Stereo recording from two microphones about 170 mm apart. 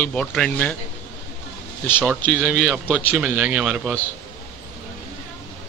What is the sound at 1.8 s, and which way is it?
Speech, 10° left (ahead or behind).